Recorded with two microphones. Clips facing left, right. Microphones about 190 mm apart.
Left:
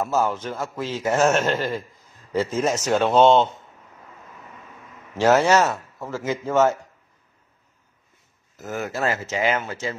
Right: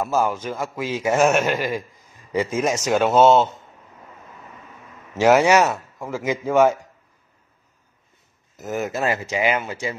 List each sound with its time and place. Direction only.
0.0 s a man's voice: 10° right (ahead or behind)
5.1 s a man's voice: 10° right (ahead or behind)
8.5 s a man's voice: 20° right (ahead or behind)